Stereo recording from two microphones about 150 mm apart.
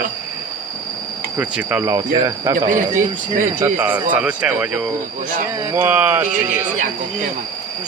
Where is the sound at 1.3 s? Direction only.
10° right (ahead or behind).